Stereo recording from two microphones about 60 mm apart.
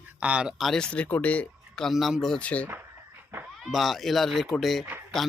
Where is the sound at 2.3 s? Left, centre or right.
Left.